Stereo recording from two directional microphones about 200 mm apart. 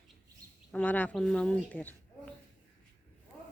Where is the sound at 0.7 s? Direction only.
10° left (ahead or behind).